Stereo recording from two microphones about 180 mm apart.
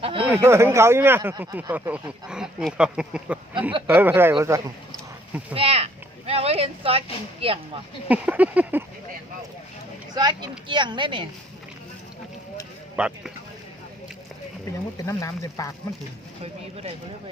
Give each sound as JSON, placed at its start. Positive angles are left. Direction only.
{"t": 0.0, "sound": "speech", "side_deg": -30}
{"t": 0.4, "sound": "speech", "side_deg": -15}
{"t": 5.5, "sound": "speech", "side_deg": -35}
{"t": 8.0, "sound": "speech", "side_deg": -10}
{"t": 10.2, "sound": "speech", "side_deg": -25}
{"t": 13.0, "sound": "speech", "side_deg": -5}
{"t": 14.9, "sound": "speech", "side_deg": 20}
{"t": 16.4, "sound": "speech", "side_deg": -35}